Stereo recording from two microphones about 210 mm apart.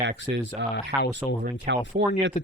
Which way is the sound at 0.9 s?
10° right (ahead or behind).